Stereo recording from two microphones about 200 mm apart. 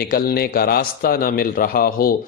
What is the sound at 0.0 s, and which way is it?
A man's voice, 50° left (ahead or behind).